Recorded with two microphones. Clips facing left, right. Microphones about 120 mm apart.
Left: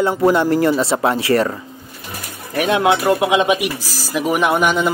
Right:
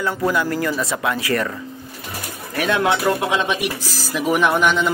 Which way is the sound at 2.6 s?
20° left (ahead or behind).